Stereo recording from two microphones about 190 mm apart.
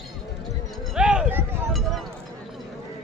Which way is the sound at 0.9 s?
5° right (ahead or behind).